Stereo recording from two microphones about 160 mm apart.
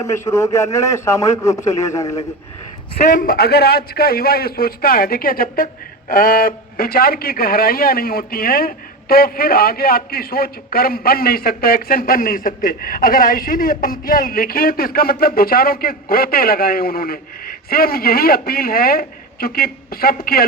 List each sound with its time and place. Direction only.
0.0 s speech: 20° left (ahead or behind)
3.1 s a man's voice: 60° left (ahead or behind)